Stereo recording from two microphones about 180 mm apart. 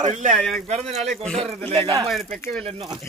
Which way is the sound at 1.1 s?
Centre (ahead or behind).